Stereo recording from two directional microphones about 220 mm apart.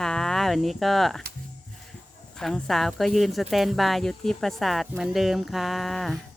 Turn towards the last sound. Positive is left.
turn(degrees=0)  # may be behind; listen again after turning